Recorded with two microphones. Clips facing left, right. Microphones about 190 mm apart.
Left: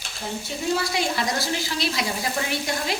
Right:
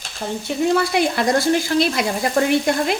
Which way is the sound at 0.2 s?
70° right (ahead or behind).